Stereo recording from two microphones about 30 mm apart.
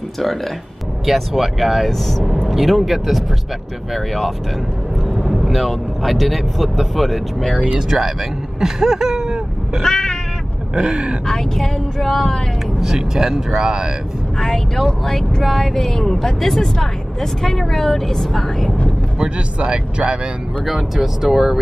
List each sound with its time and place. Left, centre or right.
1.0 s speech: centre
1.9 s speech: centre
2.4 s vehicle: centre
2.7 s speech: centre
5.0 s vehicle: centre
5.5 s speech: centre
9.8 s cat: left
10.7 s speech: right
11.3 s speech: centre
12.8 s speech: centre
13.5 s speech: right
14.8 s speech: centre
19.1 s speech: right
20.6 s speech: centre